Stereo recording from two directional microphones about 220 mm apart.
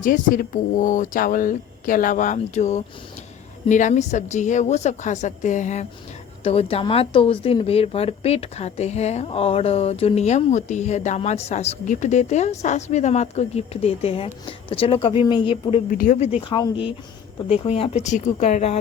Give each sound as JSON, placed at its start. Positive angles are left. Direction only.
{"t": 0.0, "sound": "speech", "side_deg": 35}
{"t": 15.9, "sound": "speech", "side_deg": 40}
{"t": 16.4, "sound": "speech", "side_deg": 25}